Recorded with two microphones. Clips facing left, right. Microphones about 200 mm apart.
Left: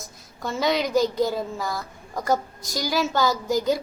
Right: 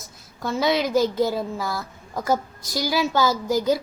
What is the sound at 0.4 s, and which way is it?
A woman's voice, centre (ahead or behind).